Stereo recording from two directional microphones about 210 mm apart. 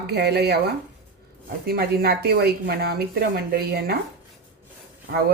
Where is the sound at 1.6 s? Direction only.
45° right (ahead or behind).